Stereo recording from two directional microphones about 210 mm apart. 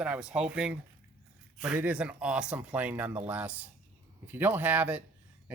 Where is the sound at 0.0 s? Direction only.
5° right (ahead or behind).